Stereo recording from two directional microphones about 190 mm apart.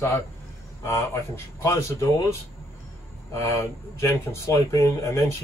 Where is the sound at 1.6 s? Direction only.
15° left (ahead or behind).